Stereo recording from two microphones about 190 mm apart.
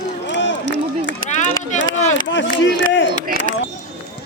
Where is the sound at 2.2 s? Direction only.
75° left (ahead or behind).